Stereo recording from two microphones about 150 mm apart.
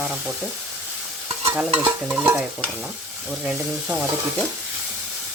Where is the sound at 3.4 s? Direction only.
10° right (ahead or behind).